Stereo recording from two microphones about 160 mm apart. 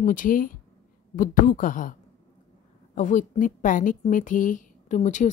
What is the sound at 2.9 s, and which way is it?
A woman's voice, 55° left (ahead or behind).